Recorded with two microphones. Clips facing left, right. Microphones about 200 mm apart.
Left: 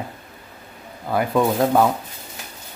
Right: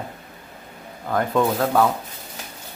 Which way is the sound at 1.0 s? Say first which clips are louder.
Left 1 dB; 10° left (ahead or behind).